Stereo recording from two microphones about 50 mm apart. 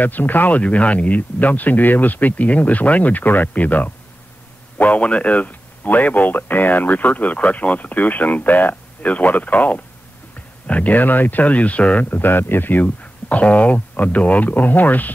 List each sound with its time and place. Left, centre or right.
0.0 s speech: left